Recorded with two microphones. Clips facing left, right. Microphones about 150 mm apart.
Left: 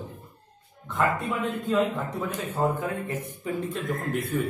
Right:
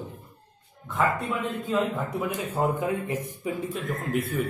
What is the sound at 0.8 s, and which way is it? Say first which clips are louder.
A man's voice: even; centre (ahead or behind).